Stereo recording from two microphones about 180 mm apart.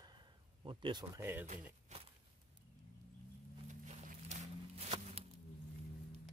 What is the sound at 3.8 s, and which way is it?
Walk, 40° right (ahead or behind).